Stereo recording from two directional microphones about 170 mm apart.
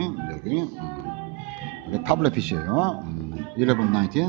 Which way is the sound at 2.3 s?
5° right (ahead or behind).